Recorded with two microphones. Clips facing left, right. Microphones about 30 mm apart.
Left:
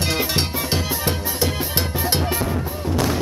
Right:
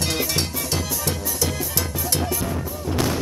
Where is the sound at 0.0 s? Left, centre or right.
Left.